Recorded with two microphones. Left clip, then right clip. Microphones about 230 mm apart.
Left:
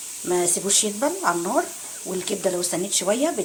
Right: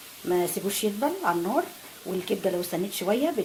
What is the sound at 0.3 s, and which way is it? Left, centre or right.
Speech, centre.